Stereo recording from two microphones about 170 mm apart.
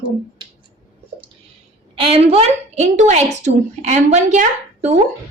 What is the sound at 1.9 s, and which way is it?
A woman's voice, 35° right (ahead or behind).